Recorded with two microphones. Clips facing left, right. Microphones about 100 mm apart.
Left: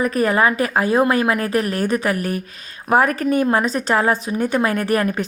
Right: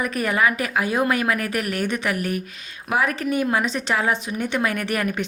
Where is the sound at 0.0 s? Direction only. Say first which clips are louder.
Left 5 dB; 35° left (ahead or behind).